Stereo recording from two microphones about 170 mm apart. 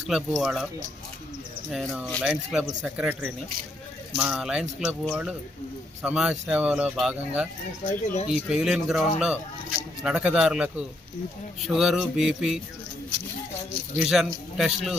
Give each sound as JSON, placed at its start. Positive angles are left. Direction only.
{"t": 0.1, "sound": "speech", "side_deg": 0}
{"t": 1.7, "sound": "speech", "side_deg": 0}
{"t": 7.9, "sound": "speech", "side_deg": 40}
{"t": 8.3, "sound": "speech", "side_deg": -5}
{"t": 14.0, "sound": "speech", "side_deg": 0}